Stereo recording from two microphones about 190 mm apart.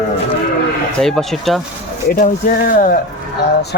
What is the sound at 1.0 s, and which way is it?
Cattle, centre (ahead or behind).